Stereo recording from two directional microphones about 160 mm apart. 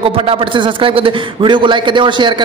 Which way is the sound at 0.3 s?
35° right (ahead or behind).